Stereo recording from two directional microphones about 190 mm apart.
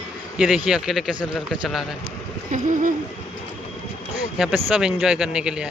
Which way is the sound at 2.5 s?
45° right (ahead or behind).